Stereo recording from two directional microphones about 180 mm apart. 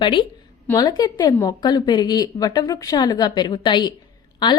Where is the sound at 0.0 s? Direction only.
25° left (ahead or behind).